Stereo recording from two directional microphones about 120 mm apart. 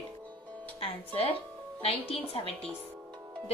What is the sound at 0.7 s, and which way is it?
A woman's voice, 55° left (ahead or behind).